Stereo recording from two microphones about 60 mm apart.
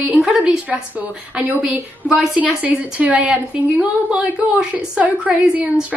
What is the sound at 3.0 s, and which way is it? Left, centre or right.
A woman's voice, right.